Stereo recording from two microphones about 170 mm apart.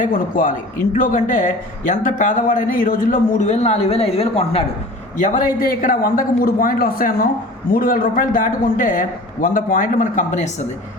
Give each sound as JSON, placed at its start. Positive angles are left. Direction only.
{"t": 0.0, "sound": "a man's voice", "side_deg": 50}
{"t": 5.2, "sound": "a man's voice", "side_deg": 50}